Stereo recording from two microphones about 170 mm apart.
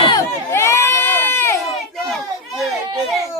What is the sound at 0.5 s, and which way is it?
Sheep, 15° left (ahead or behind).